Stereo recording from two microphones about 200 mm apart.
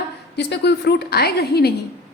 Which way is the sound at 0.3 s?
60° left (ahead or behind).